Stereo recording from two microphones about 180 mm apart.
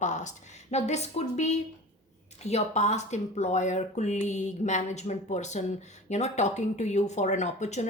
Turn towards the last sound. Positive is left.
turn(degrees=40)  # may be behind; listen again after turning